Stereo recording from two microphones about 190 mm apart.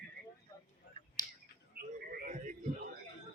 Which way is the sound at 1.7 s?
50° right (ahead or behind).